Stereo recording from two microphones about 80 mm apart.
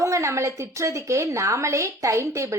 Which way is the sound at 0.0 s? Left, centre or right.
Right.